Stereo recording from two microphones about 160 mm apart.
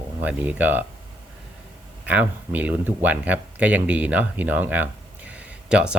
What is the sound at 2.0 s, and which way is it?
Speech, 10° right (ahead or behind).